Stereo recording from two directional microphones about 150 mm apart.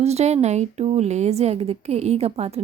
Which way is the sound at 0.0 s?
45° right (ahead or behind).